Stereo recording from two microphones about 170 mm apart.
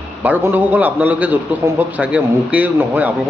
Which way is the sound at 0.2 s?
10° right (ahead or behind).